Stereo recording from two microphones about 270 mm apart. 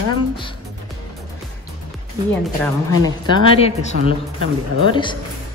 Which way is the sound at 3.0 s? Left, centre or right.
Centre.